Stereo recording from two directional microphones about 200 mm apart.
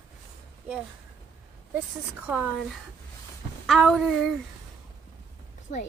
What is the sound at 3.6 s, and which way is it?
Speech, centre (ahead or behind).